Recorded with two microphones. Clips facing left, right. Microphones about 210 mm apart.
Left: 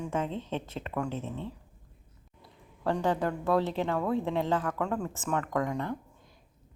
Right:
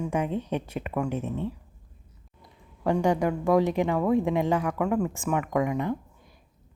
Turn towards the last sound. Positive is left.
turn(degrees=-10)  # may be behind; listen again after turning